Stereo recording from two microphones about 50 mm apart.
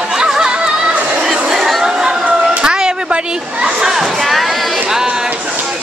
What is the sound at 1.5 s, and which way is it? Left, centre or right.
Chatter, centre.